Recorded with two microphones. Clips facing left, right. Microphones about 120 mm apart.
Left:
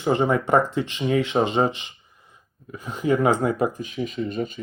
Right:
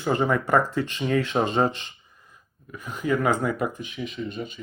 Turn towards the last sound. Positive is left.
turn(degrees=45)  # may be behind; listen again after turning